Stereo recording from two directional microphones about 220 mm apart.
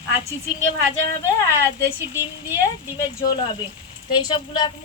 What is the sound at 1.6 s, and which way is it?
Speech, 10° left (ahead or behind).